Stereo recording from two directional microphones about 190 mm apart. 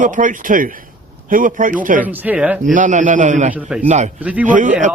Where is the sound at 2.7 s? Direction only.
45° right (ahead or behind).